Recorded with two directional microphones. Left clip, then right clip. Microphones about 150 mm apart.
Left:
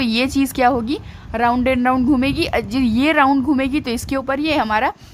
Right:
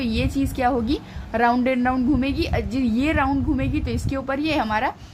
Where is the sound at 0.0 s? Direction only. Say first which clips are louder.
Left 6 dB; 35° left (ahead or behind).